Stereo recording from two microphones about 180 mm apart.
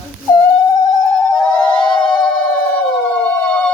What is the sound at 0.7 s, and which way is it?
Music, 15° left (ahead or behind).